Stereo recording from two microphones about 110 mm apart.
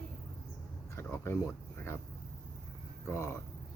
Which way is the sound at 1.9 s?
20° left (ahead or behind).